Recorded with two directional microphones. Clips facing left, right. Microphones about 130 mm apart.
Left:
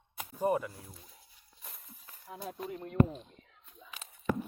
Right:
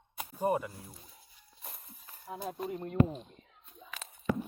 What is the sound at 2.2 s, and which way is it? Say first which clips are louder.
Speech: right 3 dB; 30° right (ahead or behind).